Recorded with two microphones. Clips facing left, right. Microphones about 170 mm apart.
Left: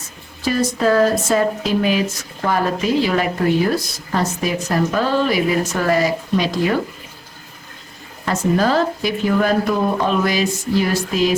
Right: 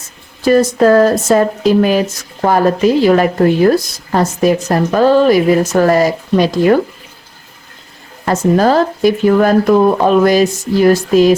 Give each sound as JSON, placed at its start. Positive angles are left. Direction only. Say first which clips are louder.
{"t": 0.4, "sound": "speech", "louder": "right 8 dB", "side_deg": -50}
{"t": 8.2, "sound": "speech", "louder": "right 6 dB", "side_deg": -45}